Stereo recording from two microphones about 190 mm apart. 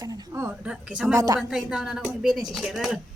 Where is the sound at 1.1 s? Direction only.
20° right (ahead or behind).